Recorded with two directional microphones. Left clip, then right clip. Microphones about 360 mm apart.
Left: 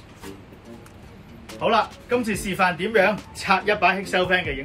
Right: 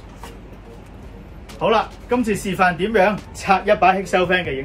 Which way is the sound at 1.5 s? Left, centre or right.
Centre.